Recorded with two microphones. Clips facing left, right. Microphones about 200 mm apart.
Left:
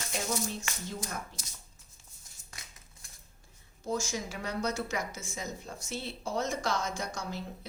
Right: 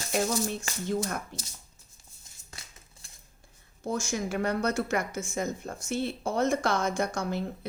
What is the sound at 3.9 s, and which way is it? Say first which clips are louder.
Speech: right 4 dB; 55° right (ahead or behind).